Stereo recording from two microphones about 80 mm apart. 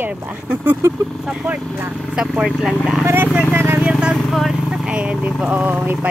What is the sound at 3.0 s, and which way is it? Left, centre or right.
Speech, right.